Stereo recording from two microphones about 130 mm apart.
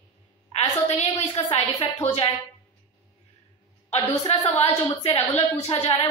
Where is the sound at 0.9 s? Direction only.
55° left (ahead or behind).